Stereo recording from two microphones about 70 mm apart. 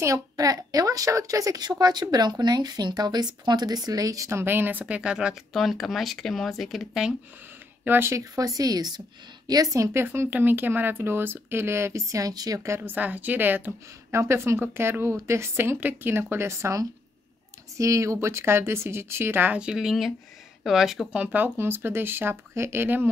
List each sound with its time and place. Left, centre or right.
0.0 s a woman's voice: right
1.6 s speech: right
4.3 s speech: right; by 5.3 s centre
5.5 s speech: centre
7.8 s speech: right
8.1 s a woman's voice: right
9.5 s a woman's voice: right
9.9 s speech: right
12.1 s a woman's voice: right
12.8 s speech: right
14.1 s speech: right
19.5 s speech: centre
21.1 s speech: right